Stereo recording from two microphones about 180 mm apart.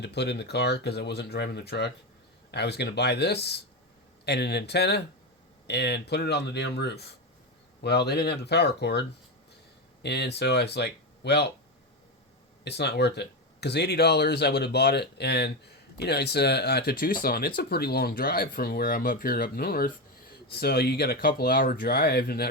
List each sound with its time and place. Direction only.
0.0 s speech: 65° left (ahead or behind)
12.6 s speech: 70° left (ahead or behind)